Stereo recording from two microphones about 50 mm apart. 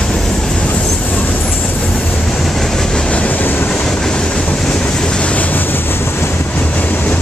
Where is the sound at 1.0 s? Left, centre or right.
Left.